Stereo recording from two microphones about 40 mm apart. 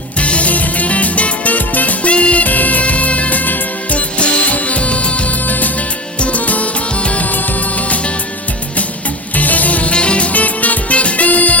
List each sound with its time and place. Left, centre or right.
0.2 s music: left
2.4 s music: left
3.9 s music: left
5.5 s music: left
9.3 s music: left
9.9 s music: left
10.3 s music: left